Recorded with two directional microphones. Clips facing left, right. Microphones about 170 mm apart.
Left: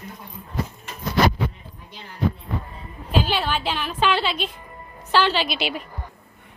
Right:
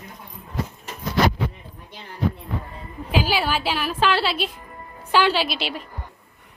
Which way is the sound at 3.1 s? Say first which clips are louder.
Right 1 dB; 10° right (ahead or behind).